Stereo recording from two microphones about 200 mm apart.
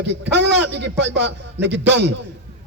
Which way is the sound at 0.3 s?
60° right (ahead or behind).